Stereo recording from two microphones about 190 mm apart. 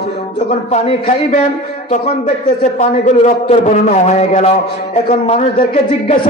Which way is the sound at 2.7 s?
35° left (ahead or behind).